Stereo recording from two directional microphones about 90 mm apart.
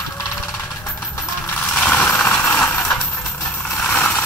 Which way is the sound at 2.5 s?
10° left (ahead or behind).